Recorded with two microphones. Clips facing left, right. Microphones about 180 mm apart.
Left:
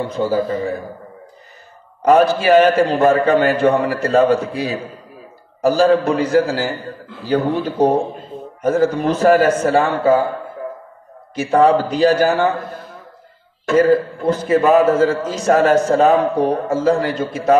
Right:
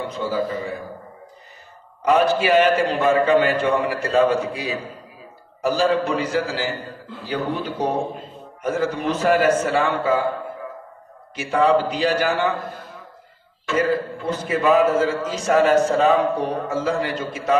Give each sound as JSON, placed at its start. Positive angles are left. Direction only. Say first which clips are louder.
{"t": 0.2, "sound": "a man's voice", "louder": "left 6 dB", "side_deg": 45}
{"t": 2.0, "sound": "a man's voice", "louder": "left 5 dB", "side_deg": 45}
{"t": 8.6, "sound": "a man's voice", "louder": "left 6 dB", "side_deg": 40}
{"t": 11.3, "sound": "a man's voice", "louder": "left 5 dB", "side_deg": 45}
{"t": 13.7, "sound": "a man's voice", "louder": "left 8 dB", "side_deg": 45}